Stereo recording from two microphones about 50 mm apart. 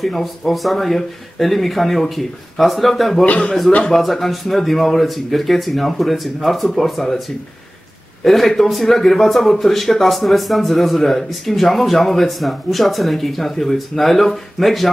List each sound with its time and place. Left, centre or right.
0.0 s a man's voice: centre
3.3 s a man's voice: left
3.9 s a man's voice: centre
8.2 s a man's voice: centre